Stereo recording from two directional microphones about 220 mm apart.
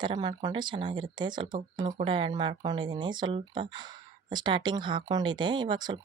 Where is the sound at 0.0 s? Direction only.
20° right (ahead or behind).